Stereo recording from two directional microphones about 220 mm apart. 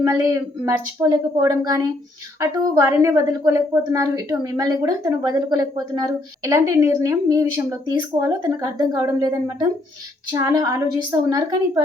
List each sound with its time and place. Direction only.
0.0 s speech: 15° right (ahead or behind)